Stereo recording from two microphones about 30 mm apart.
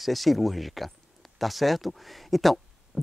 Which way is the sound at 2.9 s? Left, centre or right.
Centre.